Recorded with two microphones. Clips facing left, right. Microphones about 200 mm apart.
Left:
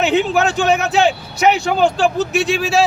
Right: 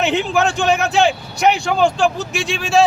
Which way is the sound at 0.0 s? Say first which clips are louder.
Left 2 dB; centre (ahead or behind).